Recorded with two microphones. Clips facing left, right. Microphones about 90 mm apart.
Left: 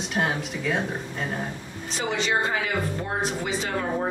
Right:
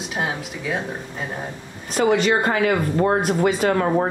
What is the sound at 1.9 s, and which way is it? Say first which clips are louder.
Speech: right 8 dB; 55° right (ahead or behind).